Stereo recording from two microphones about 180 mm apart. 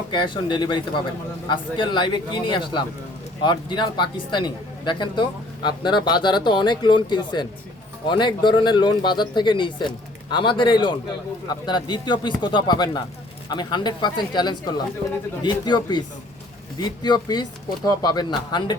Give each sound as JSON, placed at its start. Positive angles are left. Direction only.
{"t": 0.1, "sound": "speech", "side_deg": 25}